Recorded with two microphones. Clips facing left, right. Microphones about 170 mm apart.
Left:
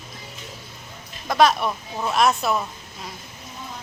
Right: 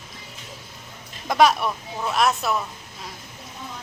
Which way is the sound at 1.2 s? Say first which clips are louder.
Even; 15° right (ahead or behind).